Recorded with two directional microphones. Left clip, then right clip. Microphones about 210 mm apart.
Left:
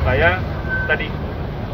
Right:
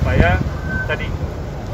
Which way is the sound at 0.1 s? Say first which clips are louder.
Left 2 dB; 5° right (ahead or behind).